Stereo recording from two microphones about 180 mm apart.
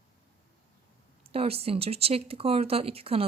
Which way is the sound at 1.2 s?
35° right (ahead or behind).